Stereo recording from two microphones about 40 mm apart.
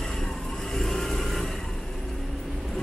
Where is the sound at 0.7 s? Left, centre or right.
Centre.